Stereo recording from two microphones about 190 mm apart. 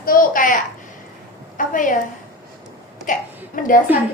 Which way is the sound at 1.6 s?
45° left (ahead or behind).